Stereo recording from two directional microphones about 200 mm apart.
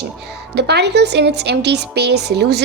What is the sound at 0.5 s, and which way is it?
A woman's voice, 55° right (ahead or behind).